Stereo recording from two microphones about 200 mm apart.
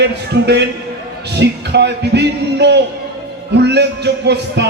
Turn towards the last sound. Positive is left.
turn(degrees=-55)  # may be behind; listen again after turning